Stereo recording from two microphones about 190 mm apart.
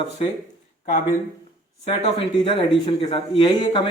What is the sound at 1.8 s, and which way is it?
A man's voice, 30° left (ahead or behind).